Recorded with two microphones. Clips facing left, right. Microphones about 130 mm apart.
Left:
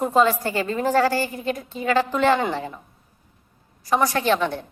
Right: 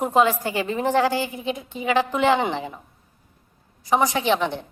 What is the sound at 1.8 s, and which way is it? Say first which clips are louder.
Speech: even; 15° right (ahead or behind).